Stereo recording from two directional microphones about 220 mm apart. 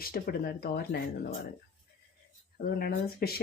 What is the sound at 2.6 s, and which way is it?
Speech, 45° left (ahead or behind).